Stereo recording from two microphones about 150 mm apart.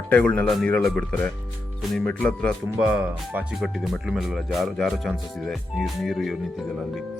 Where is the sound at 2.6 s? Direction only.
5° right (ahead or behind).